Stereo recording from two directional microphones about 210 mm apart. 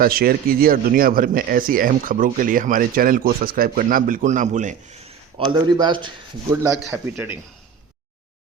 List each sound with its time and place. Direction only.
0.0 s speech: 45° right (ahead or behind)
5.5 s a man's voice: 20° right (ahead or behind)
6.5 s speech: 10° right (ahead or behind)